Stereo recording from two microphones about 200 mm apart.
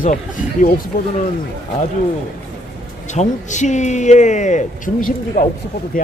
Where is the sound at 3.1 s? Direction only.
35° left (ahead or behind).